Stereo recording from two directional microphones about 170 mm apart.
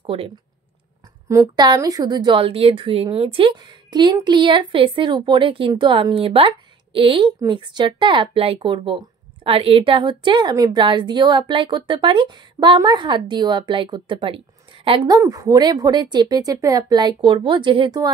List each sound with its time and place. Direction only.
0.0 s speech: 35° right (ahead or behind)
1.3 s a woman's voice: 20° right (ahead or behind)